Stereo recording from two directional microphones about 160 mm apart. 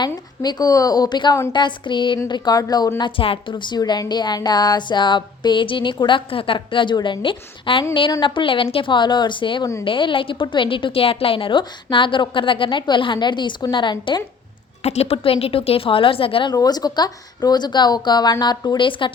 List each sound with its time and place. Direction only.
0.0 s a woman's voice: 25° left (ahead or behind)
14.8 s a woman's voice: 40° left (ahead or behind)